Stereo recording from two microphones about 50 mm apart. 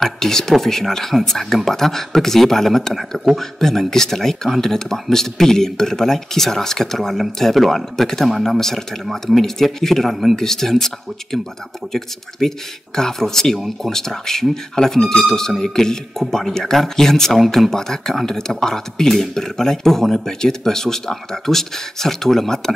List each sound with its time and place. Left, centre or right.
0.0 s a man's voice: centre
8.5 s a man's voice: centre
11.9 s a man's voice: centre